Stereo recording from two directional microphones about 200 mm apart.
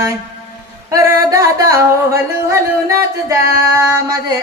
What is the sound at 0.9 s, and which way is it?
Singing, 15° right (ahead or behind).